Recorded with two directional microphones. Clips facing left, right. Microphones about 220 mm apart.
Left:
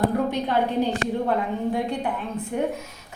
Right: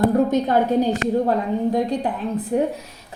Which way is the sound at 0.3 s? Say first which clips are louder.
Right 5 dB; 45° right (ahead or behind).